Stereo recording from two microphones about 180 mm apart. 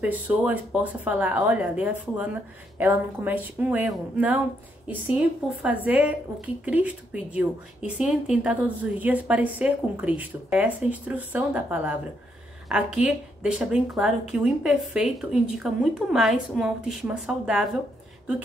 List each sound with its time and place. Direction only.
0.0 s speech: 10° right (ahead or behind)